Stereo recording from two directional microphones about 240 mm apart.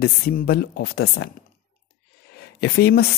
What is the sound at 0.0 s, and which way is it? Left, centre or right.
Speech, left.